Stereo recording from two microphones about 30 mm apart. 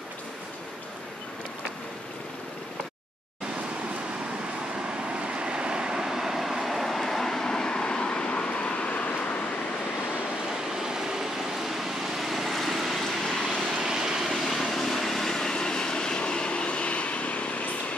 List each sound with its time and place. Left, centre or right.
5.1 s vehicle: right
6.1 s vehicle: centre; by 9.1 s left
10.8 s vehicle: centre
12.5 s vehicle: centre
13.7 s vehicle: right
14.3 s vehicle: centre
15.3 s vehicle: left